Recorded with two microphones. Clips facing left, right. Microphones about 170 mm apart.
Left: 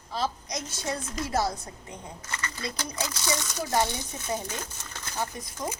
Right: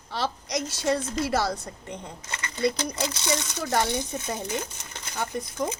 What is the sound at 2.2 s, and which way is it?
Speech, 20° right (ahead or behind).